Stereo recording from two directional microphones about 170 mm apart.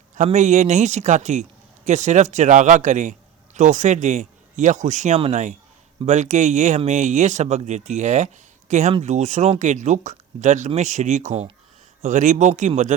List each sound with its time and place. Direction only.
0.2 s speech: 45° right (ahead or behind)